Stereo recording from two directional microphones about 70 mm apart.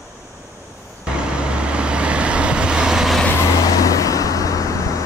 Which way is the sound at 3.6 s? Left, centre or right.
Left.